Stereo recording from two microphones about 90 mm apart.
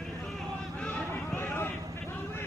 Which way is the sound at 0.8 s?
15° left (ahead or behind).